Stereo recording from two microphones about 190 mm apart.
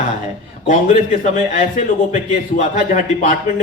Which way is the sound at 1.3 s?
40° left (ahead or behind).